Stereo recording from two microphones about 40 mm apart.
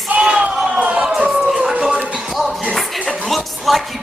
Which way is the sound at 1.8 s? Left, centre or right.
Centre.